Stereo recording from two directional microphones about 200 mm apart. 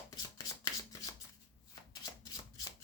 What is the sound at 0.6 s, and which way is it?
Shuffling cards, 15° left (ahead or behind).